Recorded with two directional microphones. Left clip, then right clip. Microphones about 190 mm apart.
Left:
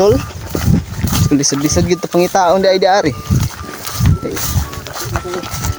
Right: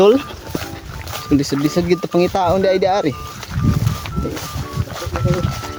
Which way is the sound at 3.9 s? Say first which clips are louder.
Left 4 dB; 60° left (ahead or behind).